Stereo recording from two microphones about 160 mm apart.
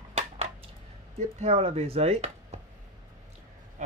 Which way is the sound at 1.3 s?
40° right (ahead or behind).